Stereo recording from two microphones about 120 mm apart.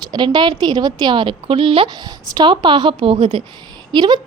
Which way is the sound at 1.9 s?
35° right (ahead or behind).